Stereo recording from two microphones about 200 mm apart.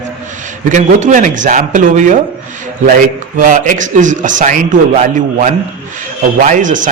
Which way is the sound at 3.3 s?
40° right (ahead or behind).